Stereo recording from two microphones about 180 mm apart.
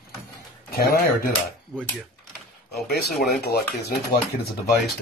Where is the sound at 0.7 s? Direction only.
55° left (ahead or behind).